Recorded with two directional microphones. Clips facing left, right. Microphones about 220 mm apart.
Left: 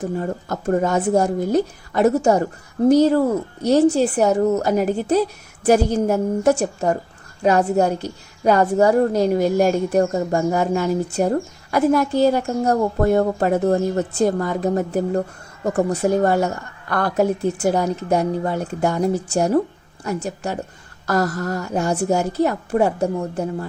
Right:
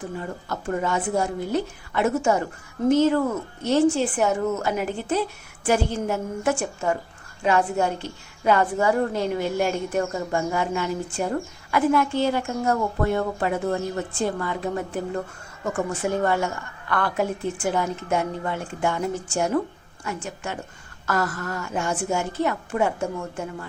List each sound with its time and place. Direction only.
0.0 s a woman's voice: 40° left (ahead or behind)